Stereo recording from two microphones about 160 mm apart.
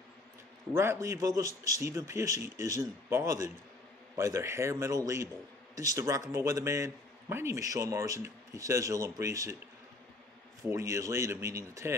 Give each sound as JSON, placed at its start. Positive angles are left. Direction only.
{"t": 0.7, "sound": "a man's voice", "side_deg": -15}
{"t": 10.7, "sound": "speech", "side_deg": -20}